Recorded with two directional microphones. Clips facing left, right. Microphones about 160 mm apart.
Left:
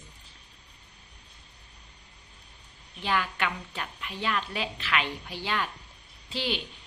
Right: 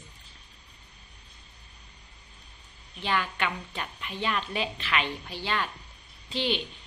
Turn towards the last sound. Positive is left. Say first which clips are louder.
# right 3 dB
turn(degrees=5)  # may be behind; listen again after turning